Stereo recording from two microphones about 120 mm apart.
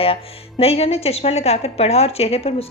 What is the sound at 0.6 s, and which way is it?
A woman's voice, 60° left (ahead or behind).